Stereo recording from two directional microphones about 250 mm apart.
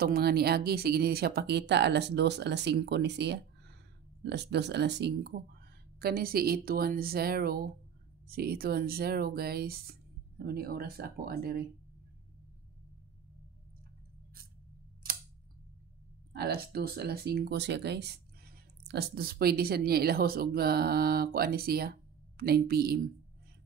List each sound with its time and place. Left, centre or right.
0.0 s speech: right
16.3 s speech: right